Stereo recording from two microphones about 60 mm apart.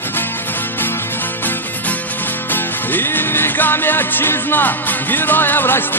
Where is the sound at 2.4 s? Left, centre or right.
Left.